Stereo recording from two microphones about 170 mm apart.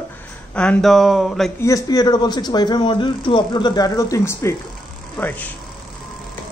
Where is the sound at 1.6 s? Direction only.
20° left (ahead or behind).